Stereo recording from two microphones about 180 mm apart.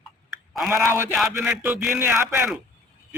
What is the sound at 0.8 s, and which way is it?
Speech, 10° right (ahead or behind).